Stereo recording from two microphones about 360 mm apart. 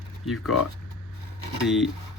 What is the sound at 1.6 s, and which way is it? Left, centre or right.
Speech, centre.